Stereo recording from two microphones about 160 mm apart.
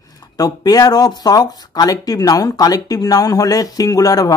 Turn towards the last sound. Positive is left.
turn(degrees=20)  # may be behind; listen again after turning